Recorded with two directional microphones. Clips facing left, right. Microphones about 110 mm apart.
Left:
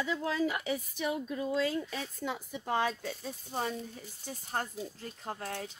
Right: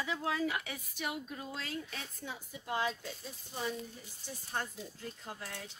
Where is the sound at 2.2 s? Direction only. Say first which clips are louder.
Left 10 dB; 90° left.